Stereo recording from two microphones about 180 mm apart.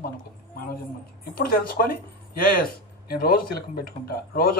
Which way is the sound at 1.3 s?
55° left (ahead or behind).